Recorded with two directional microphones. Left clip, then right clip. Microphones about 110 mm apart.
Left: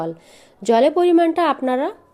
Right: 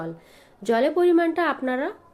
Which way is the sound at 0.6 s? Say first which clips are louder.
Left 5 dB; 60° left (ahead or behind).